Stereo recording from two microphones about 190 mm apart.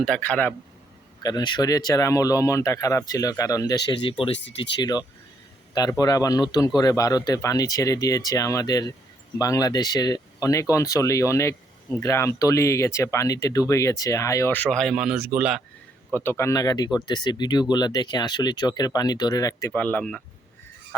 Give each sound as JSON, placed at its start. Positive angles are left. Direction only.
{"t": 0.0, "sound": "speech", "side_deg": 5}
{"t": 1.2, "sound": "speech", "side_deg": 20}
{"t": 4.8, "sound": "speech", "side_deg": 20}
{"t": 16.1, "sound": "speech", "side_deg": 10}